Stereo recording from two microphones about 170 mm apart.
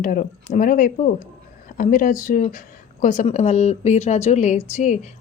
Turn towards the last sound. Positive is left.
turn(degrees=45)  # may be behind; listen again after turning